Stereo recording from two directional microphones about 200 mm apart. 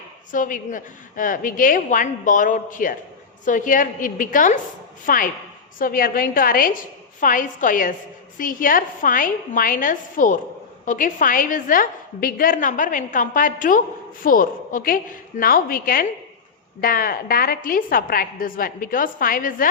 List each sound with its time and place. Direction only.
0.3 s a woman's voice: 40° left (ahead or behind)